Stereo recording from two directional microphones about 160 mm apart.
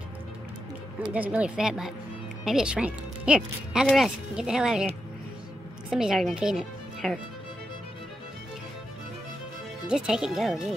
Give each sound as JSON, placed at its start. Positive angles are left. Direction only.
{"t": 1.1, "sound": "a woman's voice", "side_deg": -10}
{"t": 9.8, "sound": "speech", "side_deg": -5}